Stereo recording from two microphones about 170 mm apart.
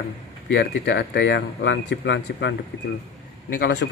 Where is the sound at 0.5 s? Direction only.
90° left.